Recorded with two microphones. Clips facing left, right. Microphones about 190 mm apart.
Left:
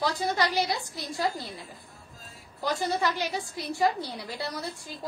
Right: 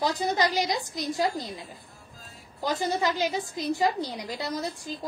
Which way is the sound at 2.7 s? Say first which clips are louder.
Right 2 dB; 20° right (ahead or behind).